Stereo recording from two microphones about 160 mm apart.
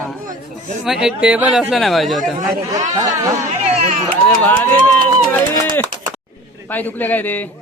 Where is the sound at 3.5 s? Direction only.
55° right (ahead or behind).